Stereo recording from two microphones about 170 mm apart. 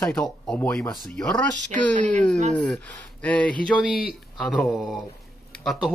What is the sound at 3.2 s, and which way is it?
Speech, 5° left (ahead or behind).